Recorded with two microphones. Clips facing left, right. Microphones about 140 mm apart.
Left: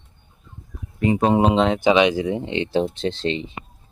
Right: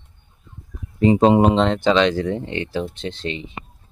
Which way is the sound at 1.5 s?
5° left (ahead or behind).